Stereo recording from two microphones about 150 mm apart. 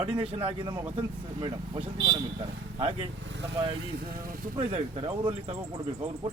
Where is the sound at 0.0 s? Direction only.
40° right (ahead or behind).